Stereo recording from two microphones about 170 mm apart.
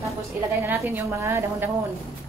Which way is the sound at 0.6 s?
15° right (ahead or behind).